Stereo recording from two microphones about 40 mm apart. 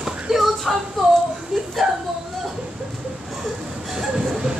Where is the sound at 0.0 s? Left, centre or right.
Centre.